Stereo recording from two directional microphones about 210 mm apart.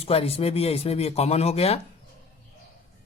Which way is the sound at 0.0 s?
30° left (ahead or behind).